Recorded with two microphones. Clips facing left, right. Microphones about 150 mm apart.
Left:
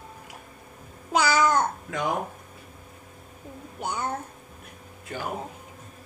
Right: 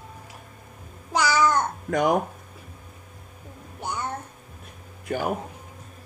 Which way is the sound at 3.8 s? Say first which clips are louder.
Left 1 dB; 10° left (ahead or behind).